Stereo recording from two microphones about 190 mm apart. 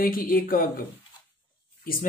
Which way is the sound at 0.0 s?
50° left (ahead or behind).